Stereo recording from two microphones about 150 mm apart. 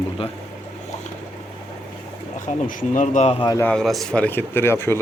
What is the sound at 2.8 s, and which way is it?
Speech, 55° left (ahead or behind).